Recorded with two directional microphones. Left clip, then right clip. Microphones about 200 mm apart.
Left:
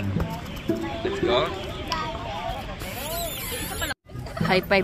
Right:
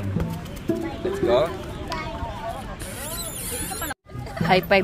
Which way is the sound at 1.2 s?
35° right (ahead or behind).